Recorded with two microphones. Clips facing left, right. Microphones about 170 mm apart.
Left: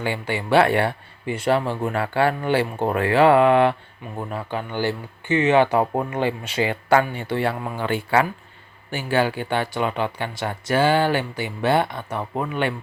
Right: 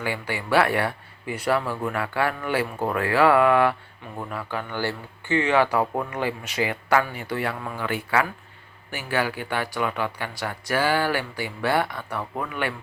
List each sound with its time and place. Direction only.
0.0 s a man's voice: 25° left (ahead or behind)